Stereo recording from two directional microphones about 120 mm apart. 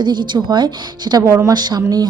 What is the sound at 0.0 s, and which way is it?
Speech, 40° right (ahead or behind).